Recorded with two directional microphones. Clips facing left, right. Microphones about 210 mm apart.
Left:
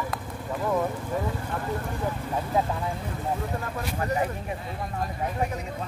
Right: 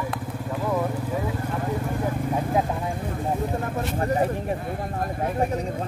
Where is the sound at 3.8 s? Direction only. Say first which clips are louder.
Right 4 dB; 30° right (ahead or behind).